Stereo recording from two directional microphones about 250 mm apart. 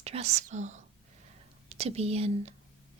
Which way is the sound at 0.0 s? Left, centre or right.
Right.